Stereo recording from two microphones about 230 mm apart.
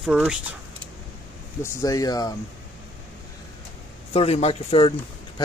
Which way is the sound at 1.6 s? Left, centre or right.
Centre.